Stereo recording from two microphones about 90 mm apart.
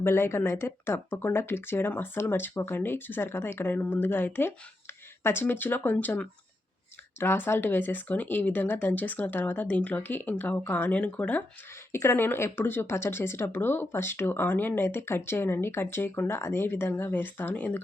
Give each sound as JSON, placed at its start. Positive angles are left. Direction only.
{"t": 0.0, "sound": "speech", "side_deg": 25}
{"t": 11.9, "sound": "speech", "side_deg": 30}